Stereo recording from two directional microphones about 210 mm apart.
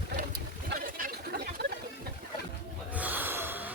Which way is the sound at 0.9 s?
40° right (ahead or behind).